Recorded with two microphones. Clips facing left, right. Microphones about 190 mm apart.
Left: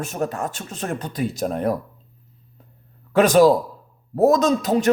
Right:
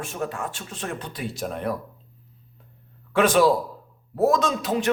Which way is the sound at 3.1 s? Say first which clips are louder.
Left 4 dB; 40° left (ahead or behind).